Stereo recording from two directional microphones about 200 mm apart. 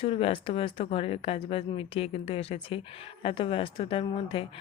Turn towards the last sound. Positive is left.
turn(degrees=25)  # may be behind; listen again after turning